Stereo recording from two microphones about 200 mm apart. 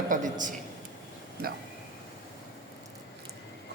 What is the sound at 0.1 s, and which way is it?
Speech, 40° right (ahead or behind).